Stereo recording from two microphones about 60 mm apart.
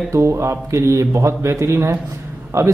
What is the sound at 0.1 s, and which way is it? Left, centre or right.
Speech, right.